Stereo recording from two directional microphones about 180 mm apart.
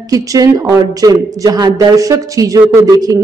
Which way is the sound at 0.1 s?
20° right (ahead or behind).